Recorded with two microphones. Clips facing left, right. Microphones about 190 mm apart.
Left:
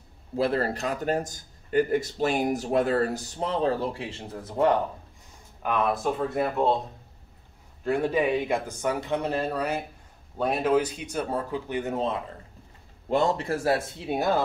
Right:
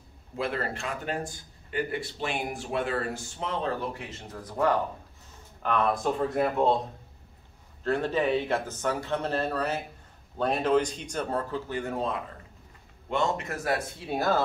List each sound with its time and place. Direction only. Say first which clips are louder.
0.4 s speech: left 6 dB; 35° left (ahead or behind)
5.6 s speech: left 1 dB; 10° left (ahead or behind)
7.8 s speech: left 2 dB; 10° left (ahead or behind)
13.1 s speech: left 4 dB; 35° left (ahead or behind); by 14.4 s 20° left (ahead or behind)